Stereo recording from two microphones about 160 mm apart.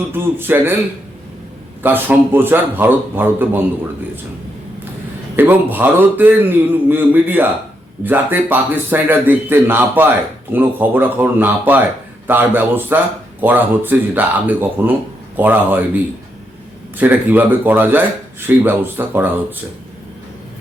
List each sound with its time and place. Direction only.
0.1 s a man's voice: 15° right (ahead or behind)
1.8 s a man's voice: 10° right (ahead or behind)
5.4 s a man's voice: 10° right (ahead or behind)
17.0 s a man's voice: 10° right (ahead or behind)